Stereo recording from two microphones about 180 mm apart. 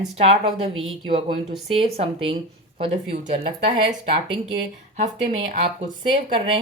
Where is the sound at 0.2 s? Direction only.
35° right (ahead or behind).